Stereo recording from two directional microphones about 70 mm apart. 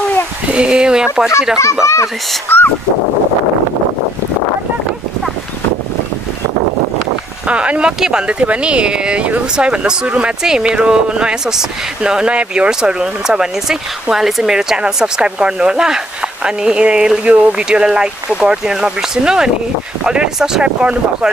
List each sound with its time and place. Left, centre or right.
0.5 s speech: centre
1.6 s speech: left
2.5 s a sound: left
7.4 s speech: centre